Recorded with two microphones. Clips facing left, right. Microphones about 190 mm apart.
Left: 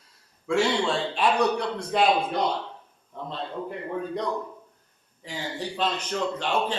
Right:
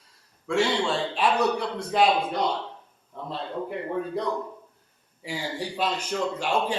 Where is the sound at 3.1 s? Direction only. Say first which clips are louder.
Left 1 dB; centre (ahead or behind).